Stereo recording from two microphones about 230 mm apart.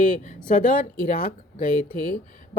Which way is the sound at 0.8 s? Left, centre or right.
Left.